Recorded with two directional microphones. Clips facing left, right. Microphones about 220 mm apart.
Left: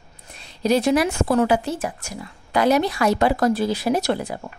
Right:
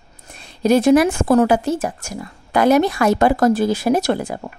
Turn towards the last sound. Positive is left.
turn(degrees=-50)  # may be behind; listen again after turning